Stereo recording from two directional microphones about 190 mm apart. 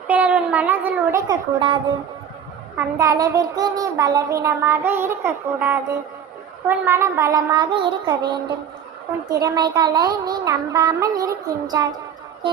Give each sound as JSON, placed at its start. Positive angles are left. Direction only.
{"t": 0.1, "sound": "a woman's voice", "side_deg": -5}
{"t": 1.3, "sound": "a woman's voice", "side_deg": -25}
{"t": 2.7, "sound": "child singing", "side_deg": -15}
{"t": 6.7, "sound": "a woman's voice", "side_deg": -10}
{"t": 9.3, "sound": "a woman's voice", "side_deg": -20}